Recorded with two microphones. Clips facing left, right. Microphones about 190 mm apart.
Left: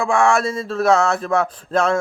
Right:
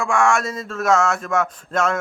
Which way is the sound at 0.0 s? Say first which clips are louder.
Left 2 dB; 35° left (ahead or behind).